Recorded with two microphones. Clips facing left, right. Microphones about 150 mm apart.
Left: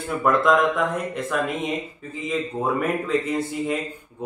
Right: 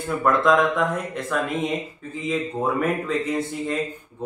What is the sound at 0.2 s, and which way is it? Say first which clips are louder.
A man's voice: even; centre (ahead or behind).